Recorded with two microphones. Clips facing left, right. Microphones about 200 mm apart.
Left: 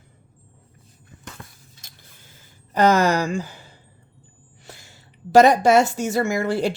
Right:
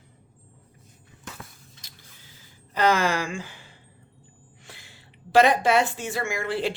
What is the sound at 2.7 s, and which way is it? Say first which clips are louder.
A woman's voice: left 5 dB; 45° left (ahead or behind).